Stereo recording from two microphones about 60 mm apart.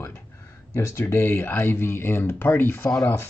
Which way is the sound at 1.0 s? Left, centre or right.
Left.